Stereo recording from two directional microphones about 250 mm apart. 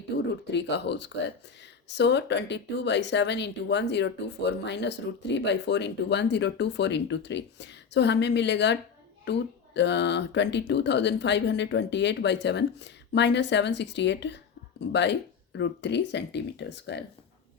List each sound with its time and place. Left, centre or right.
0.1 s speech: left